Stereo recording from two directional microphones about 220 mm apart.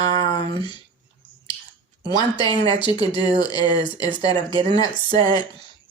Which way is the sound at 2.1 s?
20° left (ahead or behind).